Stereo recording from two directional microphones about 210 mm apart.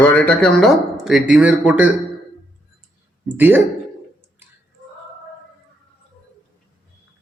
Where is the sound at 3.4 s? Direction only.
10° right (ahead or behind).